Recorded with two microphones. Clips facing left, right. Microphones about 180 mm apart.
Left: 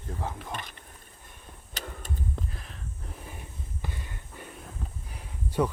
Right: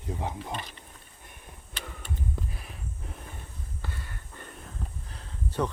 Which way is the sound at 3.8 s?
15° left (ahead or behind).